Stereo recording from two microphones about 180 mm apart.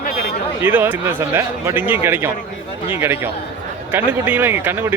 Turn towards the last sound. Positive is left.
turn(degrees=-10)  # may be behind; listen again after turning